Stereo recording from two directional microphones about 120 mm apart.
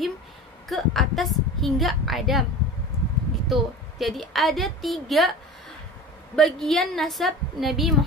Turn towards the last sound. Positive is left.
turn(degrees=0)  # may be behind; listen again after turning